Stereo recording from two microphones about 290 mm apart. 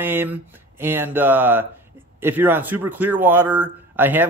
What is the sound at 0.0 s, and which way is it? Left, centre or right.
A man's voice, centre.